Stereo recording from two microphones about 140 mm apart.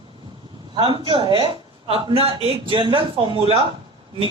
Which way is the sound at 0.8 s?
35° right (ahead or behind).